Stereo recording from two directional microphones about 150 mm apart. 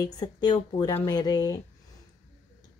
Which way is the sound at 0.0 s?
25° left (ahead or behind).